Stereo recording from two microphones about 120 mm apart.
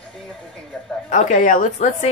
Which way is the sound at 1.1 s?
90° left.